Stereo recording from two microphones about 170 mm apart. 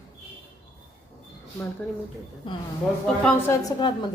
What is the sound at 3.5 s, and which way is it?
Speech, 20° left (ahead or behind).